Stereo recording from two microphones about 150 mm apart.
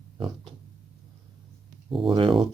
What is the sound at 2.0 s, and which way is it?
Speech, 35° right (ahead or behind).